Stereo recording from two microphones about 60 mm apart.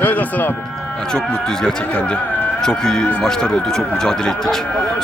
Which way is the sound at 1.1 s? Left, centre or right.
Centre.